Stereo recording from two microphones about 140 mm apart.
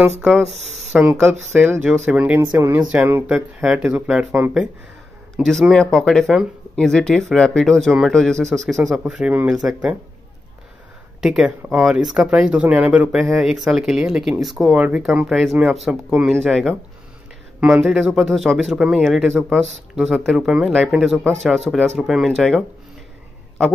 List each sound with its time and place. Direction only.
0.2 s speech: centre (ahead or behind)
5.4 s speech: centre (ahead or behind)
11.1 s speech: 5° right (ahead or behind)